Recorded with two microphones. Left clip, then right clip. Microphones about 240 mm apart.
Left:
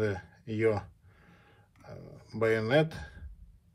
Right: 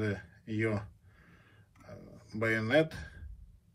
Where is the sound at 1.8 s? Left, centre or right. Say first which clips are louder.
Left 3 dB; centre.